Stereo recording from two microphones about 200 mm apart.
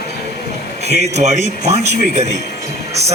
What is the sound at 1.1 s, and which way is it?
A man's voice, 35° right (ahead or behind).